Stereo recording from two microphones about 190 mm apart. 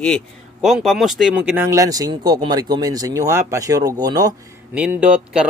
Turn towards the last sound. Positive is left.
turn(degrees=-5)  # may be behind; listen again after turning